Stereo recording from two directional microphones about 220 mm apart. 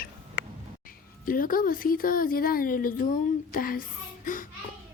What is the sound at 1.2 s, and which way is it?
Speech, 40° left (ahead or behind).